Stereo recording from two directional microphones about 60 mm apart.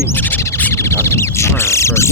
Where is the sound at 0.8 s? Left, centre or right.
Left.